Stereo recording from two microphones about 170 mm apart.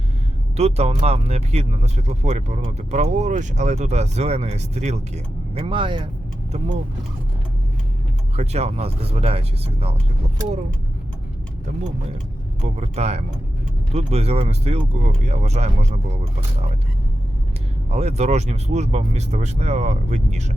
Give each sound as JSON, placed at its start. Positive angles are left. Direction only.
{"t": 0.5, "sound": "speech", "side_deg": -40}
{"t": 8.4, "sound": "speech", "side_deg": -40}
{"t": 12.6, "sound": "speech", "side_deg": -40}
{"t": 17.9, "sound": "speech", "side_deg": -40}